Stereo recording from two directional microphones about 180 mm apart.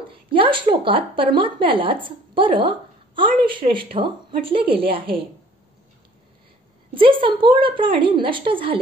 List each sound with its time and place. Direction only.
0.1 s a woman's voice: 30° right (ahead or behind)
6.9 s a woman's voice: 30° right (ahead or behind)